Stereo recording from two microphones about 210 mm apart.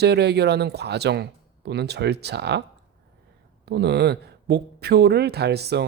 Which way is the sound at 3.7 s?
50° right (ahead or behind).